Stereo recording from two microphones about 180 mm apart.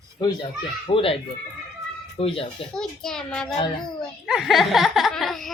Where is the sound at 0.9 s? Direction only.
30° left (ahead or behind).